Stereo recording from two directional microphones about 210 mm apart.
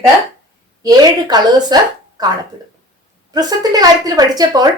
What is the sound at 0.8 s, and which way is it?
A woman's voice, 20° right (ahead or behind).